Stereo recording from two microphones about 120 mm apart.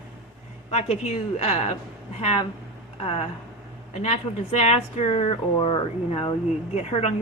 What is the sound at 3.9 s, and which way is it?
Speech, 75° left (ahead or behind).